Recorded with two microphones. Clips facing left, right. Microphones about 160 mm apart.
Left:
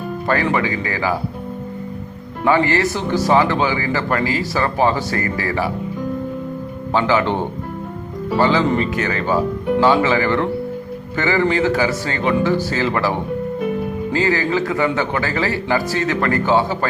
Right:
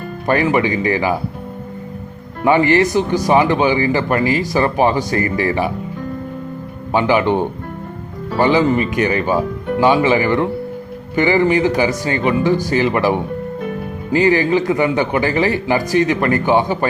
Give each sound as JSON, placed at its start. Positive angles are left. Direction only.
{"t": 0.5, "sound": "speech", "side_deg": -20}
{"t": 2.4, "sound": "speech", "side_deg": -20}
{"t": 6.9, "sound": "speech", "side_deg": -15}